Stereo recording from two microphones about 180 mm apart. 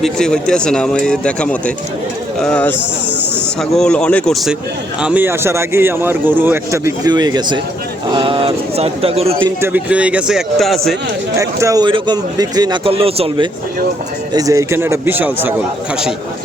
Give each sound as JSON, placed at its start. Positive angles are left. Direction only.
{"t": 0.0, "sound": "speech", "side_deg": 5}
{"t": 9.6, "sound": "speech", "side_deg": -10}
{"t": 11.3, "sound": "a man's voice", "side_deg": -20}